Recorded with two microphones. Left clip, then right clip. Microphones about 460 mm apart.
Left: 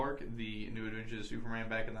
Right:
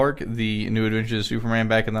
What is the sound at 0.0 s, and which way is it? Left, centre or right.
Speech, right.